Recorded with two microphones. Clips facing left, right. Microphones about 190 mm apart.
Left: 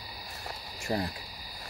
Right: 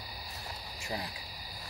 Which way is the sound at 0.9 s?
50° left (ahead or behind).